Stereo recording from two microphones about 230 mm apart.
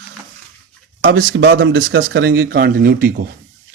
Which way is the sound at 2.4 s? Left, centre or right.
Right.